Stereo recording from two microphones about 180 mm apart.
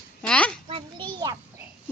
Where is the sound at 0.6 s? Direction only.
25° right (ahead or behind).